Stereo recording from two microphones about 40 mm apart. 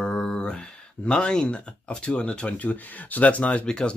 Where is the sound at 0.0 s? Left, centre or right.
Left.